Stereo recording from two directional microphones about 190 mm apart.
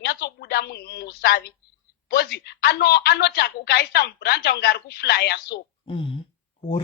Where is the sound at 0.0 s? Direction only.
60° left (ahead or behind).